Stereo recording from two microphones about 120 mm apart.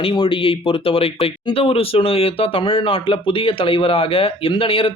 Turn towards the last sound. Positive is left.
turn(degrees=50)  # may be behind; listen again after turning